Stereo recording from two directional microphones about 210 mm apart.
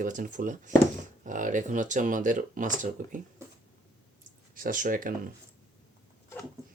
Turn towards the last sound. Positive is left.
turn(degrees=-40)  # may be behind; listen again after turning